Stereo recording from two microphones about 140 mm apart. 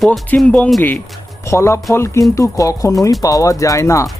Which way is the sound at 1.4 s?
20° left (ahead or behind).